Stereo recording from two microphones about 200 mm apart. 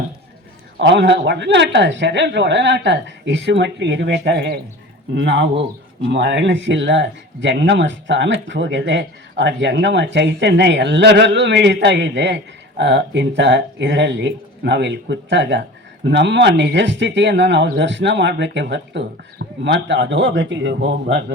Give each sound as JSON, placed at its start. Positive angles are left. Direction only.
{"t": 0.8, "sound": "speech", "side_deg": -60}